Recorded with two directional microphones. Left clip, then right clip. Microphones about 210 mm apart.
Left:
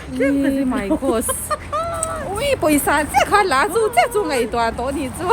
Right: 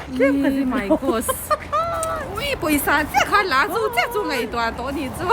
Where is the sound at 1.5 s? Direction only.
15° right (ahead or behind).